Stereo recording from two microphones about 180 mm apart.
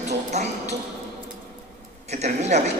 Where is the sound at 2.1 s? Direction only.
40° right (ahead or behind).